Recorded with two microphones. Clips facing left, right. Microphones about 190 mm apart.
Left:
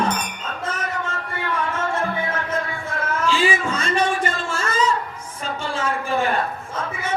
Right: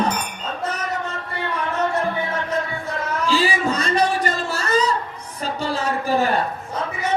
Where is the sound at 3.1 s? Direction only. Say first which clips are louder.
Even; 35° right (ahead or behind).